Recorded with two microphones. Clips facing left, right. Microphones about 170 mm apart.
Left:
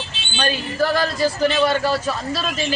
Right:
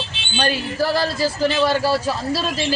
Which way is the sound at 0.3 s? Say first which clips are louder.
Even; 30° right (ahead or behind).